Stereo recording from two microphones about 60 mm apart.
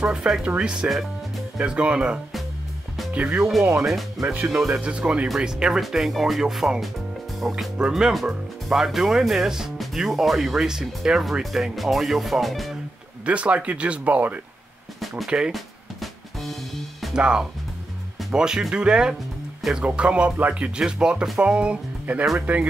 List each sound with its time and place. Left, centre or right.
0.0 s speech: centre
4.2 s speech: centre
4.7 s speech: centre
13.2 s speech: right
15.2 s speech: centre
15.5 s music: centre
17.1 s speech: centre